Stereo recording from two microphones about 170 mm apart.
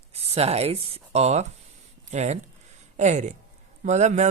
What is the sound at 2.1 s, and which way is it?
Speech, 40° right (ahead or behind).